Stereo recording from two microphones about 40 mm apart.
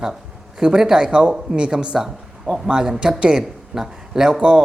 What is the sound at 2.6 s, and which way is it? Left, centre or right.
Speech, right.